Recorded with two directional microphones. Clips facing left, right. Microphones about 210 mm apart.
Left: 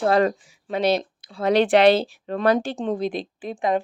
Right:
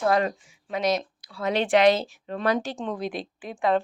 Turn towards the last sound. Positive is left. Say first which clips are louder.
# left 2 dB
turn(degrees=25)  # may be behind; listen again after turning